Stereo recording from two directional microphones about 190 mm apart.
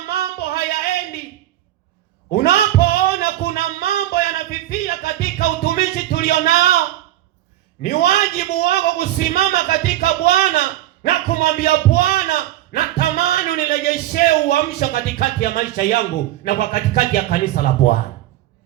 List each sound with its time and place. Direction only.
0.1 s singing: 55° left (ahead or behind)
2.3 s music: 55° left (ahead or behind)
7.8 s a man's voice: 55° left (ahead or behind)